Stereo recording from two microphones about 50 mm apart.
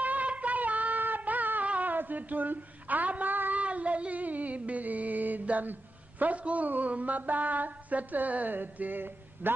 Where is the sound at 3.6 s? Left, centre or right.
Right.